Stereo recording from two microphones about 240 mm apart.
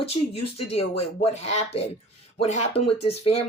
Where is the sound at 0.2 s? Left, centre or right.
Left.